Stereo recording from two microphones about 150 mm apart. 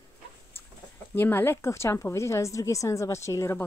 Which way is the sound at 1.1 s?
15° left (ahead or behind).